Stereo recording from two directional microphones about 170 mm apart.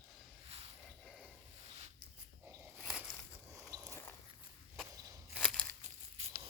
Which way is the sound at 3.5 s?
20° right (ahead or behind).